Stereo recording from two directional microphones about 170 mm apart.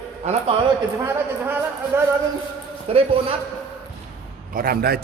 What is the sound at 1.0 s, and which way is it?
Speech, 15° right (ahead or behind).